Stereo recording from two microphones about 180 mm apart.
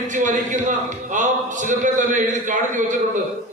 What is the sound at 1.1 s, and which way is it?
A man's voice, 45° right (ahead or behind).